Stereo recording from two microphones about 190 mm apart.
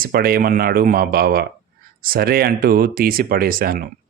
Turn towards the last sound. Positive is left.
turn(degrees=-50)  # may be behind; listen again after turning